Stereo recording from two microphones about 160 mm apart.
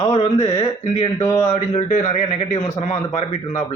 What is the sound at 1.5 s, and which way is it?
A man's voice, 45° left (ahead or behind).